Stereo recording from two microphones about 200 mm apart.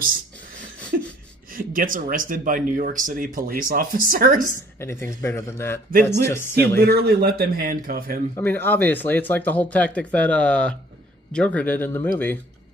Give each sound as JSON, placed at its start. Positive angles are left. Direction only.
{"t": 0.9, "sound": "a sound", "side_deg": -50}
{"t": 1.5, "sound": "speech", "side_deg": -45}
{"t": 4.7, "sound": "speech", "side_deg": 15}
{"t": 6.8, "sound": "speech", "side_deg": -50}
{"t": 8.4, "sound": "speech", "side_deg": 10}